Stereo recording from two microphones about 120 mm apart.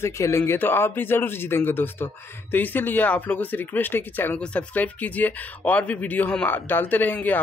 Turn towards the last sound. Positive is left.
turn(degrees=15)  # may be behind; listen again after turning